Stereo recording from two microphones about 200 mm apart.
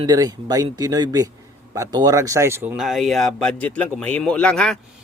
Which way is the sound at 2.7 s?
Centre (ahead or behind).